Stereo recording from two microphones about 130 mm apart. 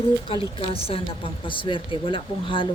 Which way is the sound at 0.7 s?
45° left (ahead or behind).